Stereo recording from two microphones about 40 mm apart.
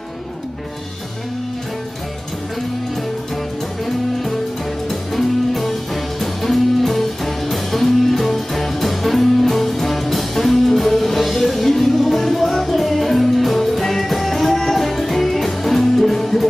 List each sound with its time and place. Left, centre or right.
3.8 s music: centre